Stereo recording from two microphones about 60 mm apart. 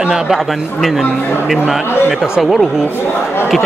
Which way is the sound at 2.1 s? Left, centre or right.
Centre.